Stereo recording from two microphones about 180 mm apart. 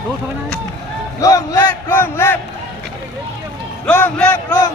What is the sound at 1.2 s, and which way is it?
Speech, 20° left (ahead or behind).